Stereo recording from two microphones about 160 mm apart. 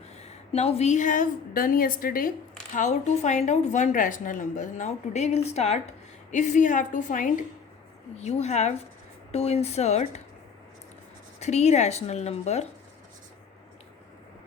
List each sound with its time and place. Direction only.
0.2 s a woman's voice: 40° left (ahead or behind); by 2.3 s 60° left (ahead or behind)
2.7 s a woman's voice: 50° left (ahead or behind)
8.1 s a woman's voice: 45° left (ahead or behind)
11.3 s a woman's voice: 45° left (ahead or behind)